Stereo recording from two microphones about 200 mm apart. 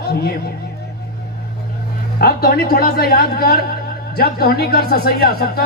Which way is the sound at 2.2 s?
50° left (ahead or behind).